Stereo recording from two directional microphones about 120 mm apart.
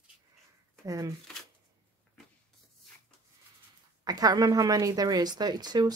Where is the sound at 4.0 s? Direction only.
35° right (ahead or behind).